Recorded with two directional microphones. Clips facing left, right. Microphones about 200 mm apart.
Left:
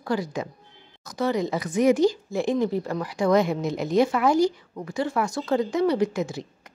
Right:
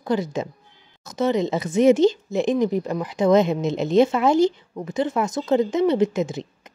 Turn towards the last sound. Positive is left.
turn(degrees=-20)  # may be behind; listen again after turning